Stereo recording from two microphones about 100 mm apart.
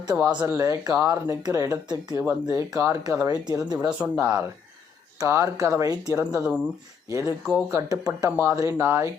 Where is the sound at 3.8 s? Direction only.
10° right (ahead or behind).